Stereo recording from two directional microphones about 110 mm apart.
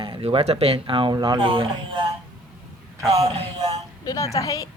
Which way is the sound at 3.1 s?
65° right (ahead or behind).